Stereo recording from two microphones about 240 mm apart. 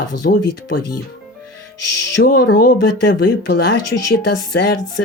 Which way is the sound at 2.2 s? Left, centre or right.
Left.